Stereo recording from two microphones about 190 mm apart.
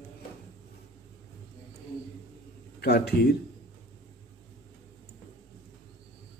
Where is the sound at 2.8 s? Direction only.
55° left (ahead or behind).